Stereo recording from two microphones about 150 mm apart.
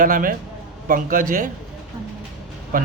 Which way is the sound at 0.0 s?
65° right (ahead or behind).